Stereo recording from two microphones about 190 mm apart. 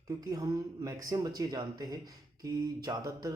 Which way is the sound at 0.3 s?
20° right (ahead or behind).